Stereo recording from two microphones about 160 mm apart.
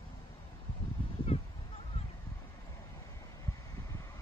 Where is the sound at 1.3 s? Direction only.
40° left (ahead or behind).